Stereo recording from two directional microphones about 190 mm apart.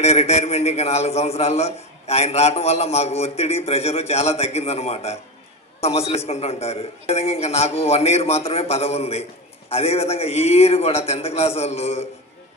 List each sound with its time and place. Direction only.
0.0 s a man's voice: 35° left (ahead or behind)